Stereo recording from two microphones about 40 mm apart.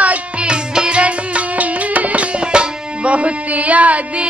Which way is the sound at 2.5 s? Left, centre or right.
Right.